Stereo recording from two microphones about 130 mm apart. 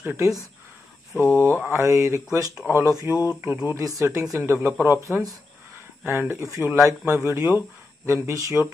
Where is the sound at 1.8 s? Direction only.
25° right (ahead or behind).